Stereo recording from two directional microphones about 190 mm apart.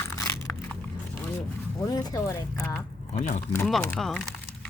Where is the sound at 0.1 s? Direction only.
15° left (ahead or behind).